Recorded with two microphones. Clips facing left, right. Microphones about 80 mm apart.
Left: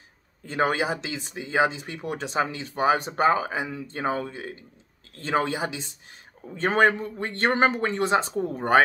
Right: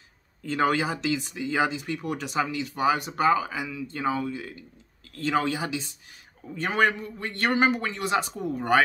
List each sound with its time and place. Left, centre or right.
0.4 s a man's voice: left